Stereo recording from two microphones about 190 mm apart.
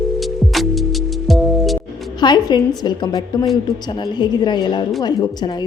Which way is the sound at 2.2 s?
20° left (ahead or behind).